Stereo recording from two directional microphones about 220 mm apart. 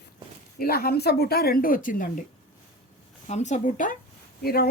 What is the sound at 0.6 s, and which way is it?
Speech, 45° left (ahead or behind).